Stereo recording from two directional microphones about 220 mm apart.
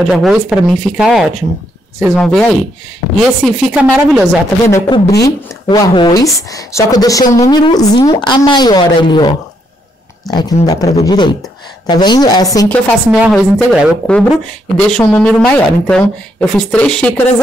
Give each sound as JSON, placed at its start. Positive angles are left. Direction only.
{"t": 0.1, "sound": "speech", "side_deg": 0}
{"t": 4.6, "sound": "speech", "side_deg": 15}
{"t": 10.3, "sound": "a woman's voice", "side_deg": 20}
{"t": 12.6, "sound": "speech", "side_deg": 5}